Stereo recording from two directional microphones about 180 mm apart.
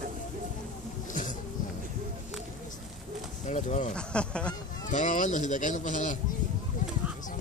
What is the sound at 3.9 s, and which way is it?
Speech, 5° left (ahead or behind).